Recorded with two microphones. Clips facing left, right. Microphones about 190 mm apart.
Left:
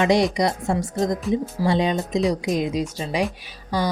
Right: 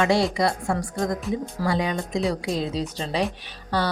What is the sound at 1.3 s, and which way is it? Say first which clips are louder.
Speech: left 5 dB; centre (ahead or behind).